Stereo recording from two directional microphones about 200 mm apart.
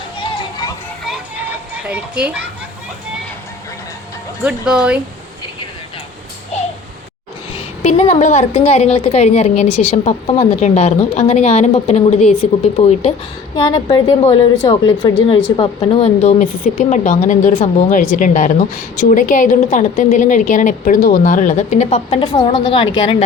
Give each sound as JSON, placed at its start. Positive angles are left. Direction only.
{"t": 1.9, "sound": "a child's voice", "side_deg": -5}
{"t": 4.4, "sound": "speech", "side_deg": -5}
{"t": 6.5, "sound": "a sound", "side_deg": 35}
{"t": 7.8, "sound": "a woman's voice", "side_deg": 30}
{"t": 16.4, "sound": "a woman's voice", "side_deg": 45}